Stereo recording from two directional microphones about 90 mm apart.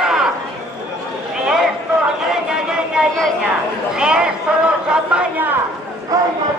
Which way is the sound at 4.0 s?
10° right (ahead or behind).